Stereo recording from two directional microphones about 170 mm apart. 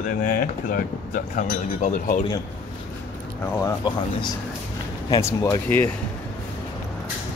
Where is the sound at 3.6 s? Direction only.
25° left (ahead or behind).